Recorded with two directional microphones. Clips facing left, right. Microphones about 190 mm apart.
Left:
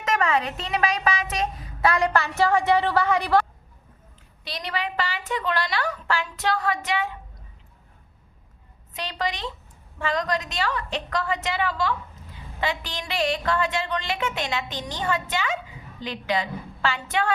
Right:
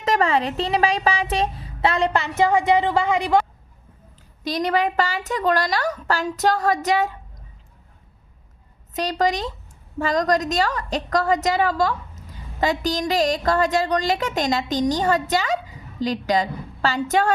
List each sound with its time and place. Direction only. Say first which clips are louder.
0.0 s speech: right 4 dB; 30° right (ahead or behind)
4.4 s a woman's voice: right 9 dB; 45° right (ahead or behind)
8.9 s a woman's voice: right 8 dB; 40° right (ahead or behind)